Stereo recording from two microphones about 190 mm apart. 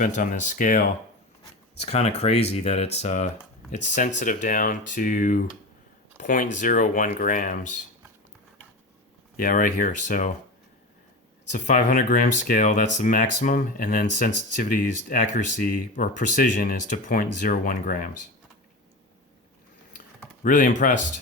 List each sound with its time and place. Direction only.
0.0 s speech: 45° left (ahead or behind)
9.4 s speech: 45° left (ahead or behind)
11.5 s speech: 45° left (ahead or behind)
20.4 s speech: 45° left (ahead or behind)